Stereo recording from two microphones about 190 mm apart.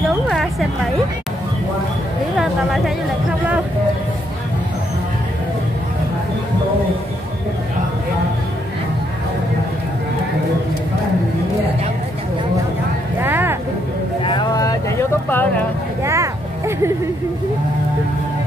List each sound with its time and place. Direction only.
0.3 s a woman's voice: centre (ahead or behind)
2.3 s a sound: 5° right (ahead or behind)
13.2 s music: 10° right (ahead or behind)
14.2 s vehicle: 25° left (ahead or behind)
16.0 s vehicle: 15° right (ahead or behind)